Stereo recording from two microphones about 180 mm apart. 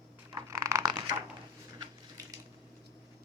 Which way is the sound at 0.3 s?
15° right (ahead or behind).